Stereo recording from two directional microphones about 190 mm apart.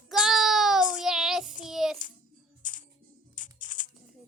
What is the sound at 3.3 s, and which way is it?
Music, 45° left (ahead or behind).